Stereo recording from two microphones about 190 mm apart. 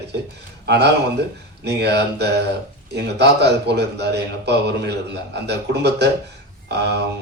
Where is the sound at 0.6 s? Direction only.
60° right (ahead or behind).